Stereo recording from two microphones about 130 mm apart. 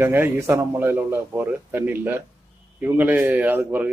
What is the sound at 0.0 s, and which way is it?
A man's voice, 15° right (ahead or behind).